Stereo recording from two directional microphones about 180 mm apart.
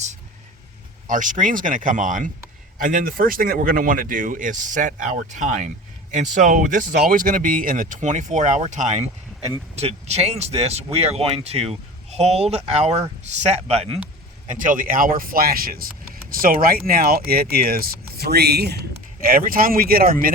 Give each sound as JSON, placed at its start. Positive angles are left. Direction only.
{"t": 1.0, "sound": "speech", "side_deg": -45}
{"t": 14.6, "sound": "speech", "side_deg": -50}